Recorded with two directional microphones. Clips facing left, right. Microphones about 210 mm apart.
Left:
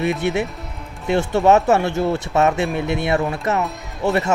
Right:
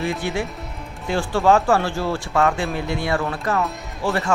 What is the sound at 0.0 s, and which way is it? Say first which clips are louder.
Speech: left 4 dB; 20° left (ahead or behind).